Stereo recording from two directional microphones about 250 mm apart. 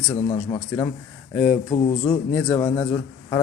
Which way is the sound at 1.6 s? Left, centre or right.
Left.